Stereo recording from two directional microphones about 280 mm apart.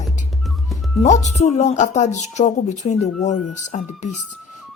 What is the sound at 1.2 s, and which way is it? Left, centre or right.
A woman's voice, left.